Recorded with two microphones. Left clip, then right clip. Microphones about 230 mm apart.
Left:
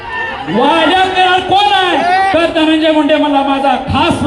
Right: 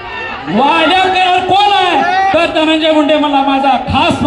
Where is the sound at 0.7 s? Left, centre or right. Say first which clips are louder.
Even; right.